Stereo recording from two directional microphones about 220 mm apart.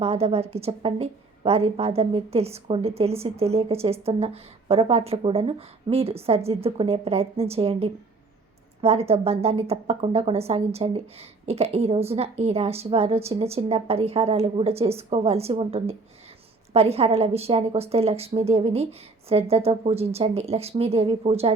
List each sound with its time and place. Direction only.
0.0 s speech: 25° right (ahead or behind)